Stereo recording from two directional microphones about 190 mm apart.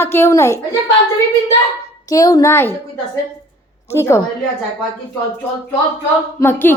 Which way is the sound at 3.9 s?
15° left (ahead or behind).